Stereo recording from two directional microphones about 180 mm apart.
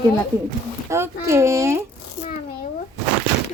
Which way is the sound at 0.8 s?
15° right (ahead or behind).